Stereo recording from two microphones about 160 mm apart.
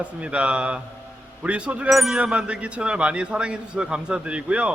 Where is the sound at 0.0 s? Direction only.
5° right (ahead or behind).